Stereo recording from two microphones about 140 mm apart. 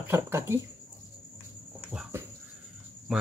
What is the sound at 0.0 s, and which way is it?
Speech, 20° right (ahead or behind).